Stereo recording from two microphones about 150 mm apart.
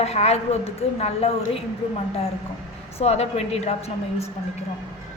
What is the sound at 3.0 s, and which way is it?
A woman's voice, 45° left (ahead or behind).